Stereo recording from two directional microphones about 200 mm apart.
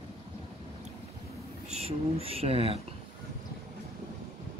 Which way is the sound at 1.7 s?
30° right (ahead or behind).